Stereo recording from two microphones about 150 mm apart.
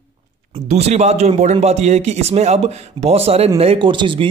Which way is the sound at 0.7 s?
45° right (ahead or behind).